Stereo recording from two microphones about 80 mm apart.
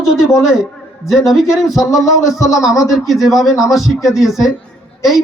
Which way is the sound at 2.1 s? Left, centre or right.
Left.